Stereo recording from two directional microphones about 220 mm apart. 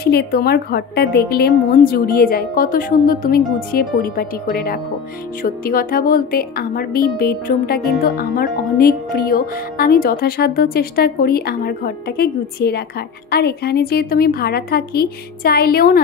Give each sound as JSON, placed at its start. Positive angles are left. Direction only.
{"t": 0.0, "sound": "speech", "side_deg": 45}